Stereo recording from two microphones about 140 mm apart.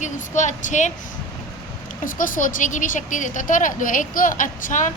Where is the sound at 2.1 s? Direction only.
75° left (ahead or behind).